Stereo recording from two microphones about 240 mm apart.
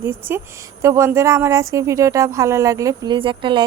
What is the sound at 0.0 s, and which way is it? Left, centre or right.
Speech, centre.